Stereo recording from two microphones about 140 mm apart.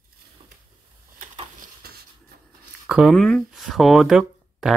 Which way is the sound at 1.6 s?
90° right.